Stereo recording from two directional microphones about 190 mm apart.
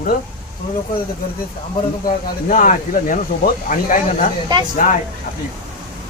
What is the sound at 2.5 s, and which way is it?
Speech, 45° left (ahead or behind).